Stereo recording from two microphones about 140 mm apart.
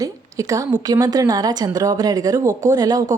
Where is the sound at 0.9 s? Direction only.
25° right (ahead or behind).